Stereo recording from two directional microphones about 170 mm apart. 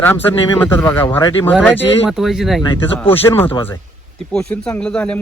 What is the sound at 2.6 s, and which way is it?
Speech, 25° left (ahead or behind).